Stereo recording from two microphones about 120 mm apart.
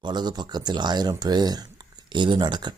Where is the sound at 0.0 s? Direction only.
35° right (ahead or behind).